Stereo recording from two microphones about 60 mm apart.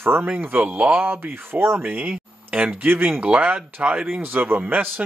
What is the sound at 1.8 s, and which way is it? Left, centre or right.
Speech, right.